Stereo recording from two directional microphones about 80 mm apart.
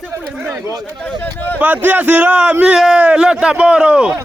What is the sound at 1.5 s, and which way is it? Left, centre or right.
A man's voice, right.